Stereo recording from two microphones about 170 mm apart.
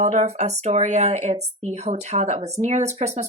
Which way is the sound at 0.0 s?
40° right (ahead or behind).